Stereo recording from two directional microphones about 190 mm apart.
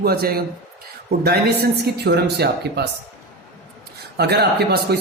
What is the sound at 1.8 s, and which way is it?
Speech, 60° right (ahead or behind).